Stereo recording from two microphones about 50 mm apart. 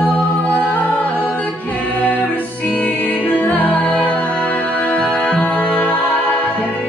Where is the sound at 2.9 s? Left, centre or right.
Left.